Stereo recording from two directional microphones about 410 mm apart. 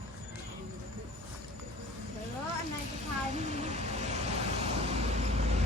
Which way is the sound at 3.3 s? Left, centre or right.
Centre.